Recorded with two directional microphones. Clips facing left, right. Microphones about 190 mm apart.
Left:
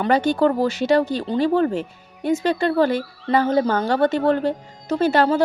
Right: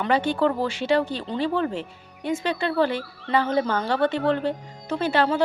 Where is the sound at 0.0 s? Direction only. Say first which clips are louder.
Left 4 dB; 45° left (ahead or behind).